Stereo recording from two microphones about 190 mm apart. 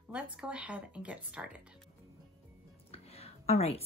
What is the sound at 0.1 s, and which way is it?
Speech, 5° right (ahead or behind).